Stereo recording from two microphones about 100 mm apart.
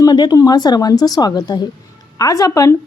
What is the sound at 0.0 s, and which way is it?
A woman's voice, 40° left (ahead or behind).